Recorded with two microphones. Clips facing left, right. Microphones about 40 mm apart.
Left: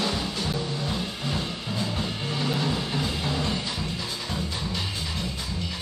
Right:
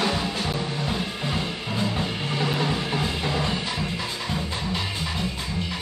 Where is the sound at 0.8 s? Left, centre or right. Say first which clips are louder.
Right 2 dB; right.